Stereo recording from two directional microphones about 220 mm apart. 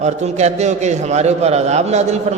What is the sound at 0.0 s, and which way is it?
A man's voice, 30° right (ahead or behind).